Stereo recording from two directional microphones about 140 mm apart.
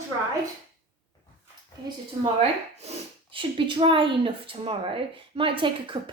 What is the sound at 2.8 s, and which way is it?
Speech, 40° right (ahead or behind).